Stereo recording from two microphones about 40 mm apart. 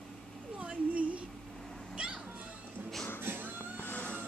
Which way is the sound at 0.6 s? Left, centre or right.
Right.